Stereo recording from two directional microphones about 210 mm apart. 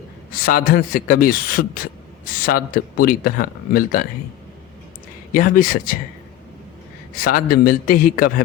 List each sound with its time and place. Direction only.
0.3 s speech: 40° left (ahead or behind)
5.3 s speech: 40° left (ahead or behind)
7.2 s speech: 45° left (ahead or behind)